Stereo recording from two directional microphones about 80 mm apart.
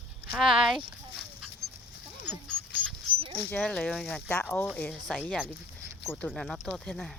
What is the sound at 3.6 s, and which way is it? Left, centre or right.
Speech, centre.